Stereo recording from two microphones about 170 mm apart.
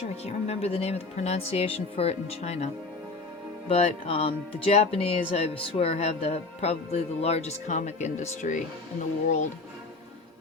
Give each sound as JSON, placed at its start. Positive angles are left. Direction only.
{"t": 0.3, "sound": "speech", "side_deg": 40}
{"t": 3.7, "sound": "speech", "side_deg": 35}